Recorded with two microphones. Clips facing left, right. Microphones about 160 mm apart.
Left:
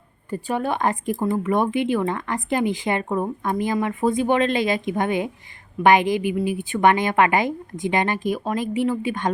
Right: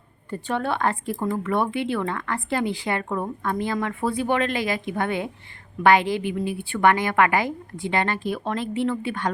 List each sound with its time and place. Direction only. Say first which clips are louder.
0.3 s speech: left 2 dB; 10° left (ahead or behind)